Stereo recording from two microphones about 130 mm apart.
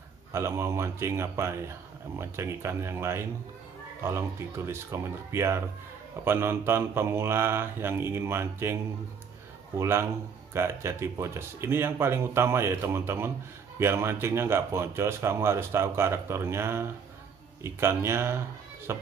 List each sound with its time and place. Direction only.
0.3 s speech: 20° right (ahead or behind)
9.8 s speech: 20° right (ahead or behind)